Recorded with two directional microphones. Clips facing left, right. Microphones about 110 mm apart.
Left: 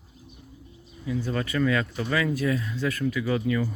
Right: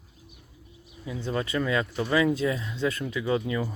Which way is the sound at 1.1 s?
25° right (ahead or behind).